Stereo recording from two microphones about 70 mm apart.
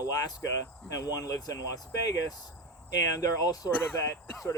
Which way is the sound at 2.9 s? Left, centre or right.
Left.